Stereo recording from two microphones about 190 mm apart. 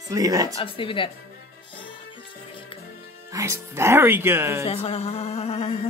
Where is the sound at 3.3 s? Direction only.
15° right (ahead or behind).